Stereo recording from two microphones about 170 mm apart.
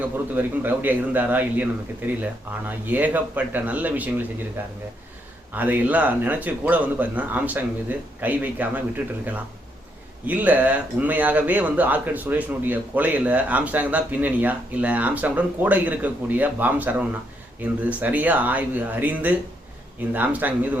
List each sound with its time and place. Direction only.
0.3 s speech: 10° right (ahead or behind)
10.2 s speech: 10° right (ahead or behind)